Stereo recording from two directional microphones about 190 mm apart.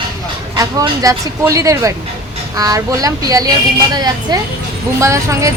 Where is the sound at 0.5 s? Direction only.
15° right (ahead or behind).